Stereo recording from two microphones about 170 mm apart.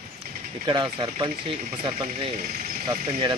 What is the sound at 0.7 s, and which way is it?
Speech, 25° right (ahead or behind).